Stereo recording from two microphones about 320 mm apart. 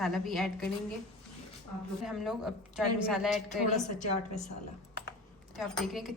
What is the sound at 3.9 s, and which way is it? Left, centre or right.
Speech, left.